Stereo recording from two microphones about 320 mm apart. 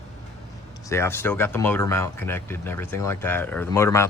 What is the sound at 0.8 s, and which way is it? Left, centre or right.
Speech, centre.